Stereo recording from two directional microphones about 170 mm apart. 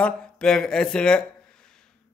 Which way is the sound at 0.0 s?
5° left (ahead or behind).